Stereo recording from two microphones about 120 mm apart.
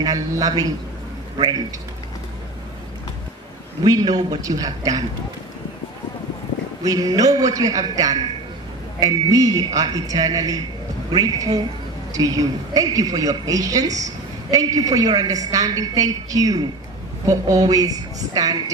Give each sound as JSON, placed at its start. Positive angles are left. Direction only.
{"t": 0.0, "sound": "a woman's voice", "side_deg": -30}
{"t": 3.8, "sound": "a woman's voice", "side_deg": -35}
{"t": 6.8, "sound": "a woman's voice", "side_deg": -30}